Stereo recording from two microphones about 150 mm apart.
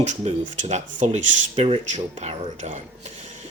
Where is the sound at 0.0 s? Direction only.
50° right (ahead or behind).